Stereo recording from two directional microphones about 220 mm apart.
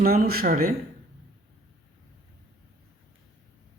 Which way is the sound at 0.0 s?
40° right (ahead or behind).